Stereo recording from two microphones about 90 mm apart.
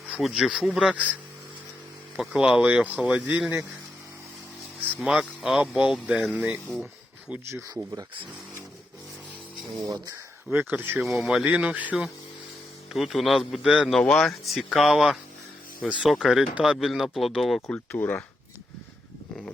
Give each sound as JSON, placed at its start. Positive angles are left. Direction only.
{"t": 0.2, "sound": "speech", "side_deg": -5}
{"t": 2.1, "sound": "speech", "side_deg": -10}
{"t": 5.0, "sound": "speech", "side_deg": -5}
{"t": 7.4, "sound": "speech", "side_deg": -30}
{"t": 9.8, "sound": "speech", "side_deg": -40}
{"t": 10.5, "sound": "speech", "side_deg": -20}
{"t": 11.0, "sound": "speech", "side_deg": -5}
{"t": 12.9, "sound": "speech", "side_deg": 0}
{"t": 14.0, "sound": "speech", "side_deg": 10}
{"t": 17.7, "sound": "speech", "side_deg": 20}